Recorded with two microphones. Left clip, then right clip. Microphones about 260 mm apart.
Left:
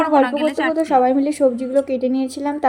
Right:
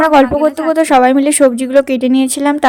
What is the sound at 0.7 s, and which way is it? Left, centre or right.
Speech, right.